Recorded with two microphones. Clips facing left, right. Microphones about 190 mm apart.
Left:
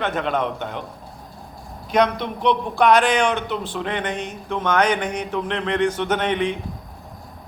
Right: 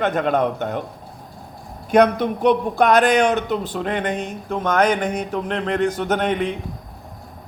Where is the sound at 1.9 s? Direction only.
50° right (ahead or behind).